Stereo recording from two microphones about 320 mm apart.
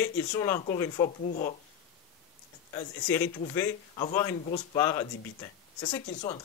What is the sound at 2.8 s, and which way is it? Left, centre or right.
Speech, centre.